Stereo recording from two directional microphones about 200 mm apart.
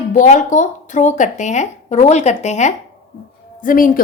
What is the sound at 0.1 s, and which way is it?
A woman's voice, 40° left (ahead or behind).